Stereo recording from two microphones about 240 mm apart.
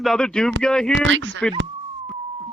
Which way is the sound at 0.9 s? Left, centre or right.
Right.